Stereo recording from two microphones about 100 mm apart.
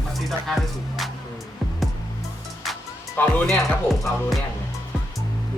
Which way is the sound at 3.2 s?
15° left (ahead or behind).